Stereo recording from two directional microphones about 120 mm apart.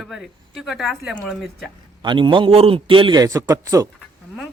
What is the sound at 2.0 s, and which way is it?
A man's voice, 40° right (ahead or behind).